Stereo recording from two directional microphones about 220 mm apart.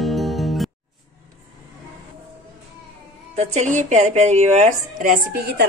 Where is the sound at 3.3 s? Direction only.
30° right (ahead or behind).